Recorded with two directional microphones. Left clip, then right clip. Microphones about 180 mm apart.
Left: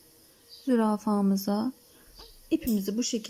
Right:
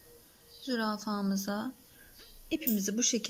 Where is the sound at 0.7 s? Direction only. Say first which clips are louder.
Left 7 dB; 35° left (ahead or behind).